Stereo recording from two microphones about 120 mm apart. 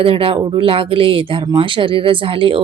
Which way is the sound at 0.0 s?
50° right (ahead or behind).